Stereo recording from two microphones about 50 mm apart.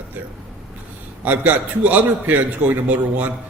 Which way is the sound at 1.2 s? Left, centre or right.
Right.